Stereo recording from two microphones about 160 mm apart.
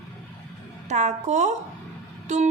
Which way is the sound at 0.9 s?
45° right (ahead or behind).